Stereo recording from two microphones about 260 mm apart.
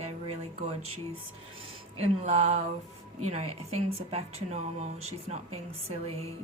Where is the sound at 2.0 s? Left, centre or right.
Right.